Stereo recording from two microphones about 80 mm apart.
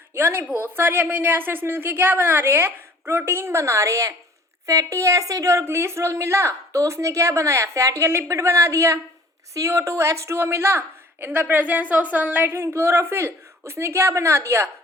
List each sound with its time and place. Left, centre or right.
0.1 s a woman's voice: right
12.5 s a woman's voice: right